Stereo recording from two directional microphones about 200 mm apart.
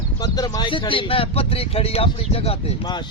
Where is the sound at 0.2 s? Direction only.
20° left (ahead or behind).